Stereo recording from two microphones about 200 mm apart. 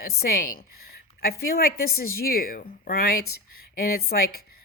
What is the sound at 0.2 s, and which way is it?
A woman's voice, 45° left (ahead or behind).